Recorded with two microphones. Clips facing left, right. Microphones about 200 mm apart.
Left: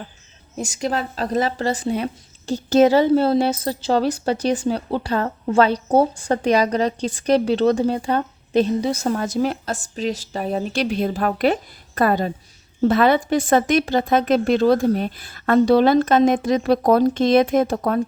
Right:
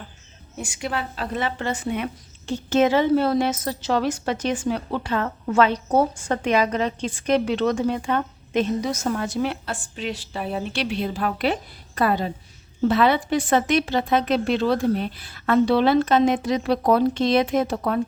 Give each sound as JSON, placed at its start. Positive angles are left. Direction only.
{"t": 0.5, "sound": "a woman's voice", "side_deg": 40}